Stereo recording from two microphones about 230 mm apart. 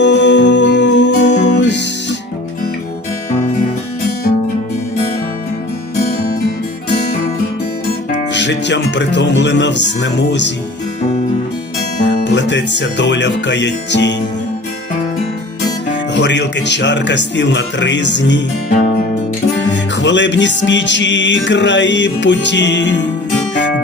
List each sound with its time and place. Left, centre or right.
0.0 s music: left
8.3 s speech: left
12.2 s speech: left
16.1 s speech: left
19.7 s music: left
20.7 s speech: left